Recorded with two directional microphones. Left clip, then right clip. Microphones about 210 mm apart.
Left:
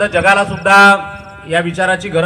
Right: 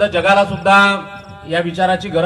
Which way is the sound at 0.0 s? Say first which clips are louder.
Left 1 dB; 10° left (ahead or behind).